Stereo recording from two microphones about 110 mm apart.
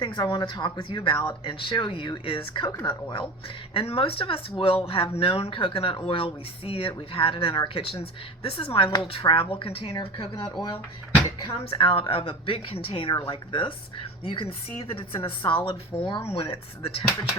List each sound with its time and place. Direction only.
0.0 s a woman's voice: 45° left (ahead or behind)